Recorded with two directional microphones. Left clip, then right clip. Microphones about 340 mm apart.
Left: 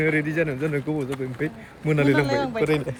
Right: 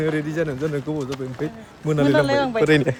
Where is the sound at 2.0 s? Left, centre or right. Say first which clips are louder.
Right 5 dB; right.